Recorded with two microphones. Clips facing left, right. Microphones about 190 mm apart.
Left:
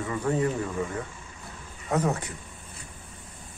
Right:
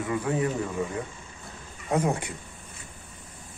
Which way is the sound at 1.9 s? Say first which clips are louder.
Right 1 dB; 10° right (ahead or behind).